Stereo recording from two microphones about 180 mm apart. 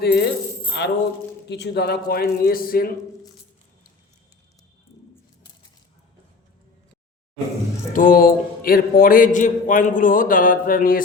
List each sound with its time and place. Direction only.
0.0 s speech: 65° left (ahead or behind)
0.7 s speech: 75° left (ahead or behind); by 2.9 s 55° left (ahead or behind)
7.9 s a man's voice: 50° left (ahead or behind)